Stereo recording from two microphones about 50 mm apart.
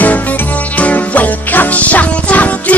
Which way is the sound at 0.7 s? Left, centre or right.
Left.